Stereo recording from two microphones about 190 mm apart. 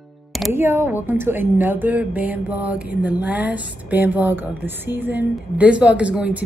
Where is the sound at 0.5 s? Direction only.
10° right (ahead or behind).